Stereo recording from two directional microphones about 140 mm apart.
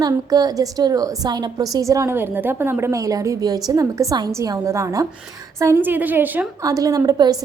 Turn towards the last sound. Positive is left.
turn(degrees=-30)  # may be behind; listen again after turning